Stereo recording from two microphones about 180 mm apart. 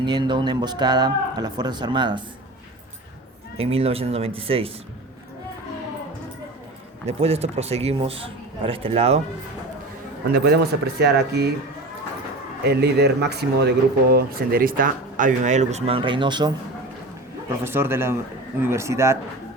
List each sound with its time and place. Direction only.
0.0 s speech: 25° right (ahead or behind)
3.6 s speech: 35° right (ahead or behind)
7.2 s speech: 35° right (ahead or behind)
10.3 s speech: 60° right (ahead or behind)
12.6 s speech: 65° right (ahead or behind); by 16.5 s 25° right (ahead or behind)
17.6 s speech: 15° right (ahead or behind)